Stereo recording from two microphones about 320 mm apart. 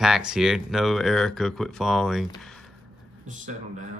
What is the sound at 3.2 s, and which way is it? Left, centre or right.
Speech, right.